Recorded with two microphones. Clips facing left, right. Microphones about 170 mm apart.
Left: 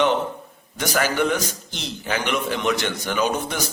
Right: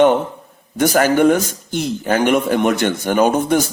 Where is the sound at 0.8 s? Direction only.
50° right (ahead or behind).